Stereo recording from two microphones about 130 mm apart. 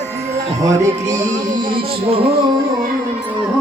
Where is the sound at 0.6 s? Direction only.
25° right (ahead or behind).